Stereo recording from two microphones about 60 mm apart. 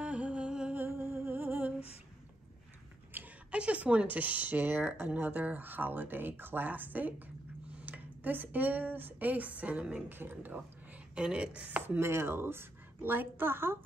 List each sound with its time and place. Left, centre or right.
0.0 s music: right
0.7 s music: right
3.1 s a sound: right
3.5 s a woman's voice: right
11.1 s speech: centre
12.0 s a woman's voice: right